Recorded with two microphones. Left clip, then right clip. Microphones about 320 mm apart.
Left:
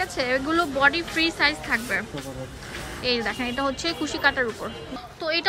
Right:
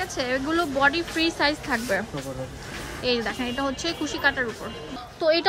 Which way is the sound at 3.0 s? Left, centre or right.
Centre.